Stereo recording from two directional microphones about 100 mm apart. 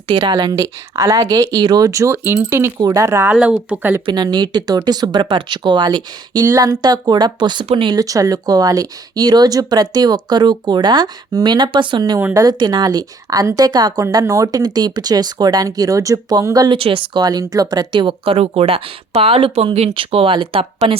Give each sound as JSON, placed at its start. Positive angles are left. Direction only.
{"t": 0.1, "sound": "a woman's voice", "side_deg": -50}
{"t": 3.3, "sound": "speech", "side_deg": -10}
{"t": 4.0, "sound": "speech", "side_deg": -50}
{"t": 6.4, "sound": "a woman's voice", "side_deg": -35}
{"t": 7.9, "sound": "a woman's voice", "side_deg": -35}
{"t": 16.7, "sound": "speech", "side_deg": -65}
{"t": 17.2, "sound": "a woman's voice", "side_deg": -40}
{"t": 18.3, "sound": "speech", "side_deg": -90}